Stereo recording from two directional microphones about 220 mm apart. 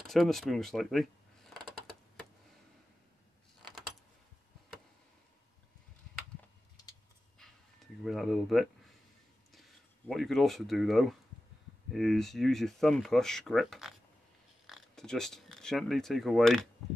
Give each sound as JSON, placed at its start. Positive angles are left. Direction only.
{"t": 0.0, "sound": "speech", "side_deg": 0}
{"t": 7.3, "sound": "a sound", "side_deg": 0}
{"t": 9.5, "sound": "speech", "side_deg": 0}